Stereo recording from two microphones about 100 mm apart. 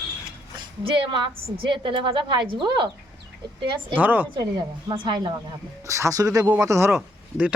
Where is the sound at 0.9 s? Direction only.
60° right (ahead or behind).